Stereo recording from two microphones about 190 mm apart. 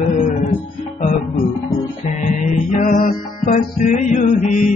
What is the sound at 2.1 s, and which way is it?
Music, 40° left (ahead or behind).